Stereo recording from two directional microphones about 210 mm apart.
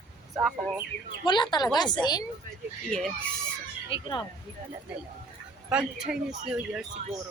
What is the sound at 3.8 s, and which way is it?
Speech, 25° left (ahead or behind).